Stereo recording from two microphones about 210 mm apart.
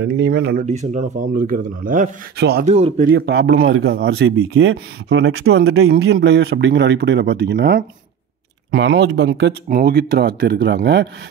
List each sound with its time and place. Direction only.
0.0 s speech: 55° right (ahead or behind)
0.7 s speech: 35° right (ahead or behind); by 2.6 s 50° right (ahead or behind)
2.6 s speech: 30° right (ahead or behind)
3.1 s speech: 50° right (ahead or behind)
3.5 s a man's voice: 70° right (ahead or behind)
4.0 s speech: 60° right (ahead or behind)
5.9 s speech: 70° right (ahead or behind); by 11.1 s 50° right (ahead or behind)